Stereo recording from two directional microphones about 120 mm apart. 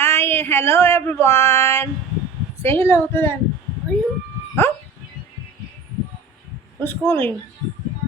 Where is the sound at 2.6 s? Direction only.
20° left (ahead or behind).